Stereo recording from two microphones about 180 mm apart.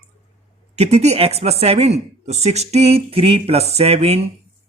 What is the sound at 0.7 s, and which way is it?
Speech, 35° right (ahead or behind).